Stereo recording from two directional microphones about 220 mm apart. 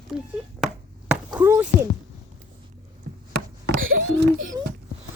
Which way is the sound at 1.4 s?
5° right (ahead or behind).